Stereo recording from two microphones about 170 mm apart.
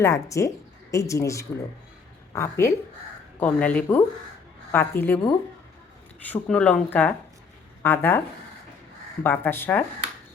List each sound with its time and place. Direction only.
0.0 s speech: 15° left (ahead or behind)
6.2 s speech: 10° left (ahead or behind)
9.2 s speech: 10° left (ahead or behind)